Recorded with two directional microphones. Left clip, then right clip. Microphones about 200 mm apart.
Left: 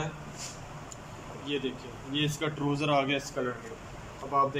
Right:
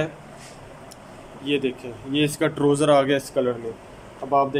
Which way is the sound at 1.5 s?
40° right (ahead or behind).